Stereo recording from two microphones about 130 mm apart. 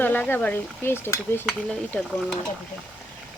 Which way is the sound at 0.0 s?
15° left (ahead or behind).